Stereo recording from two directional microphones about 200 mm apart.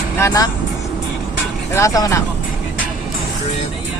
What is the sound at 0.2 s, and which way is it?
Speech, 15° left (ahead or behind).